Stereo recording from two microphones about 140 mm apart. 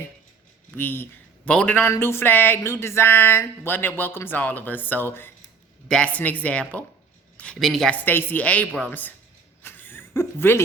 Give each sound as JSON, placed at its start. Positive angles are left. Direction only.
{"t": 0.8, "sound": "speech", "side_deg": 15}
{"t": 8.0, "sound": "speech", "side_deg": 15}
{"t": 9.6, "sound": "a sound", "side_deg": 15}